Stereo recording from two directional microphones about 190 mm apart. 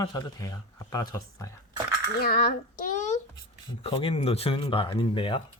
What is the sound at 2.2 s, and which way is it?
Coin, 55° left (ahead or behind).